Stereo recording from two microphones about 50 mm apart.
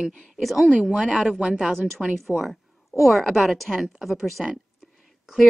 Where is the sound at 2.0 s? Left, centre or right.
Centre.